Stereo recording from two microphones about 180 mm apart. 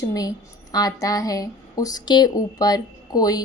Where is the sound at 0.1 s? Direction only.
20° left (ahead or behind).